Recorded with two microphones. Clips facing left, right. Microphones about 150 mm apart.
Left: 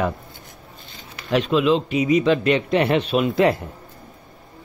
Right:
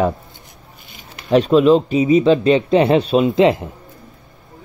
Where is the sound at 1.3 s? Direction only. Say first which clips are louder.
Right 7 dB; 40° right (ahead or behind); by 3.7 s 20° right (ahead or behind).